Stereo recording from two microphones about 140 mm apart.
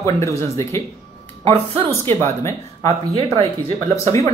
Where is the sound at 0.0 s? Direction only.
20° left (ahead or behind).